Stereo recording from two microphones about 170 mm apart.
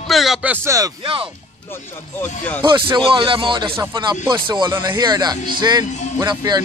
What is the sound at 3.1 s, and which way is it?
A man's voice, 30° right (ahead or behind).